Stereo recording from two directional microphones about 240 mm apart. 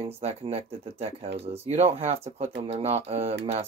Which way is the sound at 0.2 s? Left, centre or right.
Right.